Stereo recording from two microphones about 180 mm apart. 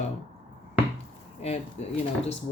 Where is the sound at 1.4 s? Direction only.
35° left (ahead or behind).